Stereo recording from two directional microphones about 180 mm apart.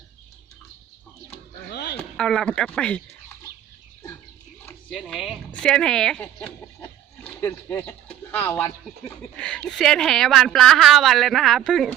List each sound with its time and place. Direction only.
1.7 s a sound: 70° left (ahead or behind)
2.0 s speech: 5° left (ahead or behind)
4.9 s speech: 5° left (ahead or behind)